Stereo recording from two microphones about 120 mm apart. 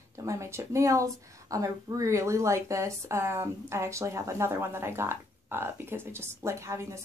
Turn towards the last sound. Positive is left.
turn(degrees=-25)  # may be behind; listen again after turning